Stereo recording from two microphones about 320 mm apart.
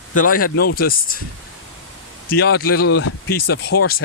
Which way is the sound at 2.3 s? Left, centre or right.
Left.